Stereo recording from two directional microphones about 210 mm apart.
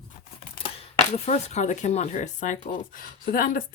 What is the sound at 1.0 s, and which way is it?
Speech, 30° left (ahead or behind).